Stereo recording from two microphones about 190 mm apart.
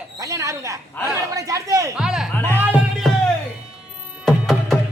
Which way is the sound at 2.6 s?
5° right (ahead or behind).